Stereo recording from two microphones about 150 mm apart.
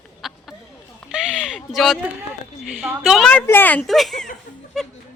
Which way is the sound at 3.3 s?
10° left (ahead or behind).